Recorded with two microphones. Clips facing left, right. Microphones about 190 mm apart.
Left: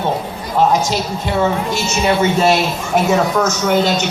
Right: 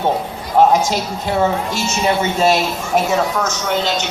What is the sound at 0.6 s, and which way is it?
Speech, 50° right (ahead or behind).